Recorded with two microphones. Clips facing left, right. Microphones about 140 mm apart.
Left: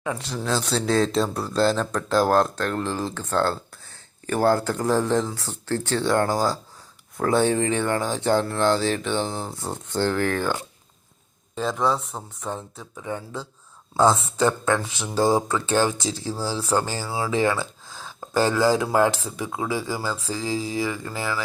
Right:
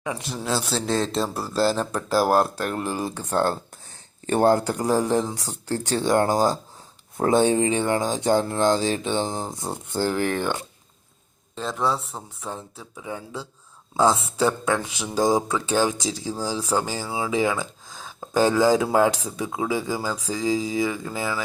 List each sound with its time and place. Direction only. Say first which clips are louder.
0.0 s speech: left 1 dB; 10° right (ahead or behind)
11.5 s speech: left 2 dB; centre (ahead or behind); by 21.4 s 20° right (ahead or behind)